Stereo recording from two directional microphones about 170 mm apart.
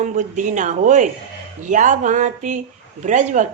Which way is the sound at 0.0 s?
45° right (ahead or behind).